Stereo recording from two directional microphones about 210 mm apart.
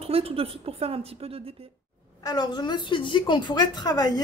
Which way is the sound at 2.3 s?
20° left (ahead or behind).